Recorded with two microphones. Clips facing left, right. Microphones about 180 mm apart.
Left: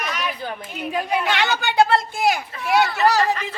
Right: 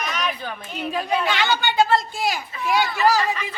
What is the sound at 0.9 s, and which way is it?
Speech, 10° left (ahead or behind).